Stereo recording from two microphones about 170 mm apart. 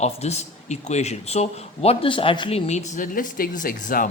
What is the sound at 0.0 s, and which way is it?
Speech, 40° left (ahead or behind).